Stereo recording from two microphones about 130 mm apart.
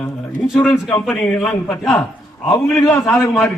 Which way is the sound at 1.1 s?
10° left (ahead or behind).